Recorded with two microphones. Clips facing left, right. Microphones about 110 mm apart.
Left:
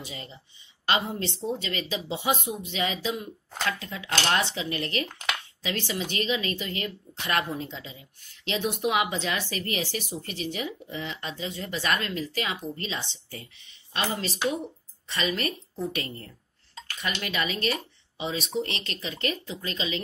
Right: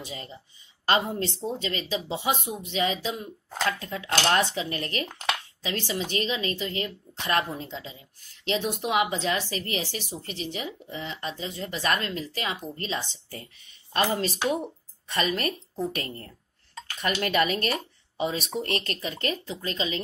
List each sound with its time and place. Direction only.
0.0 s speech: 40° right (ahead or behind)